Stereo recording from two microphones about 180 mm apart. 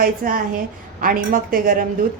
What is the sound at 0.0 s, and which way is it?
A woman's voice, 50° right (ahead or behind).